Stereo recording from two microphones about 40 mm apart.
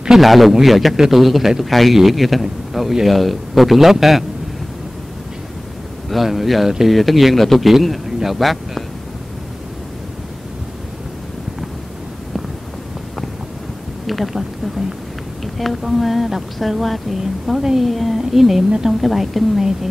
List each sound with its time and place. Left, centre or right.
0.2 s speech: centre
6.0 s speech: centre
14.0 s a sound: centre
15.4 s speech: centre